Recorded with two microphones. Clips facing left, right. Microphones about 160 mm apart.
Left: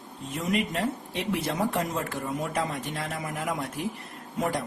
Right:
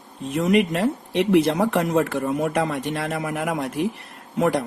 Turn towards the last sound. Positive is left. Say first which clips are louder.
# right 8 dB
turn(degrees=-70)  # may be behind; listen again after turning